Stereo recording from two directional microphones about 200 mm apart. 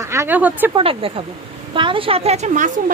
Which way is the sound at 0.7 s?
25° right (ahead or behind).